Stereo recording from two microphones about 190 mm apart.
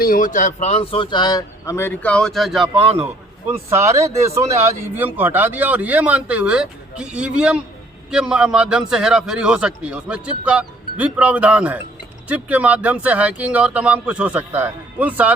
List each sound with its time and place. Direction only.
0.0 s speech: 45° left (ahead or behind); by 2.8 s centre (ahead or behind)
4.1 s a man's voice: 15° right (ahead or behind)